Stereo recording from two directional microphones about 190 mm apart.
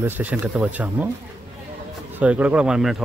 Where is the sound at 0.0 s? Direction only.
10° right (ahead or behind).